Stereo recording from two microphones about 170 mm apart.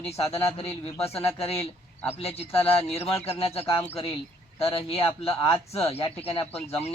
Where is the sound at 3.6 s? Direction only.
15° left (ahead or behind).